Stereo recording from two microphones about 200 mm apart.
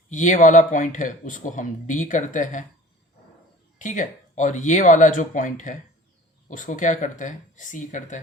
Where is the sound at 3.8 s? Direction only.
40° left (ahead or behind).